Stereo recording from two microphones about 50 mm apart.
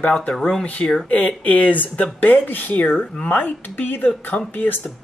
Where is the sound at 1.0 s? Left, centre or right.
Left.